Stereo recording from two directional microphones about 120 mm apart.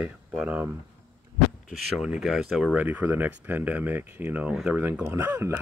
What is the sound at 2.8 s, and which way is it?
Speech, 15° right (ahead or behind).